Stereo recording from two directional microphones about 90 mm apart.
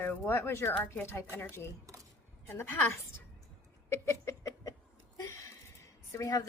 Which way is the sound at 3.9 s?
30° left (ahead or behind).